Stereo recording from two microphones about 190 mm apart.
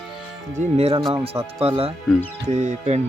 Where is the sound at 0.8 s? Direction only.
25° right (ahead or behind).